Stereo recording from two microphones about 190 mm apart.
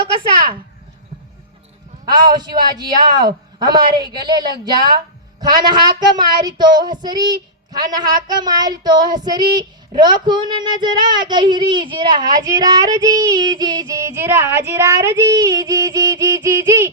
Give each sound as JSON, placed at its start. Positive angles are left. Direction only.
{"t": 2.0, "sound": "a woman's voice", "side_deg": -20}
{"t": 4.3, "sound": "a woman's voice", "side_deg": -20}